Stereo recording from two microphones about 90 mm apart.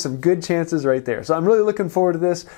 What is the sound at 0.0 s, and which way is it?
Speech, 10° left (ahead or behind).